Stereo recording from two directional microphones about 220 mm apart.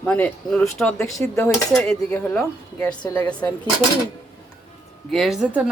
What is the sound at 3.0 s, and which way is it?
Speech, 20° left (ahead or behind).